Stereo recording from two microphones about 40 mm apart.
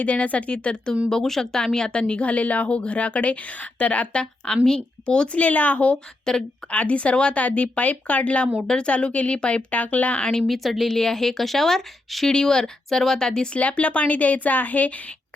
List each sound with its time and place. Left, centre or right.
0.0 s a woman's voice: left
1.1 s speech: centre
2.2 s a woman's voice: left
5.4 s a woman's voice: left
6.3 s speech: centre
6.7 s a woman's voice: left
8.6 s a woman's voice: centre; by 10.2 s left
10.4 s a woman's voice: centre
10.9 s speech: centre
12.3 s speech: centre
13.6 s a woman's voice: left